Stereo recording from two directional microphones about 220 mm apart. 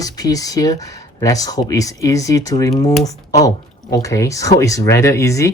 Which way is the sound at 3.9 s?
15° left (ahead or behind).